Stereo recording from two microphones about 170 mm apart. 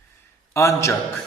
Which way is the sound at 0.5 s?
15° left (ahead or behind).